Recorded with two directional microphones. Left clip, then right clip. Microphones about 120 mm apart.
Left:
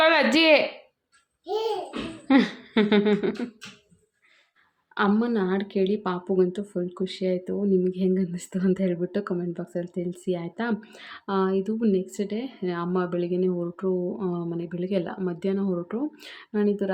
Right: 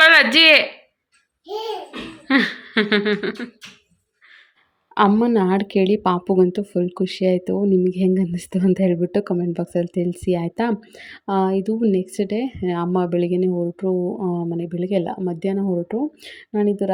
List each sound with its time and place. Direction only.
0.0 s speech: 10° left (ahead or behind)
2.2 s speech: 10° left (ahead or behind)
5.0 s speech: 55° right (ahead or behind); by 7.6 s 70° right (ahead or behind)
7.6 s a woman's voice: 60° right (ahead or behind)
13.6 s speech: 35° right (ahead or behind)